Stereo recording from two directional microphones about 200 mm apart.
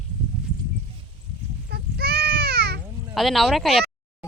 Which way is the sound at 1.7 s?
50° right (ahead or behind).